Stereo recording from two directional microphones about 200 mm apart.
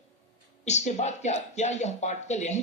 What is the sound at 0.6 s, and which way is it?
Speech, 35° left (ahead or behind).